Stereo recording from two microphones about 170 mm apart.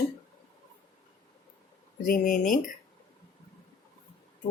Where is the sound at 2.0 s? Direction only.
50° left (ahead or behind).